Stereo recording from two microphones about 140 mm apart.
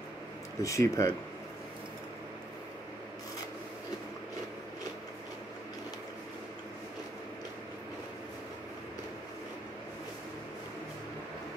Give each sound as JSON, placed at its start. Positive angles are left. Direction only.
{"t": 0.6, "sound": "speech", "side_deg": 20}